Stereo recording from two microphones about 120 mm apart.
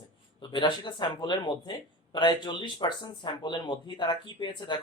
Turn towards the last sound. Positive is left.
turn(degrees=40)  # may be behind; listen again after turning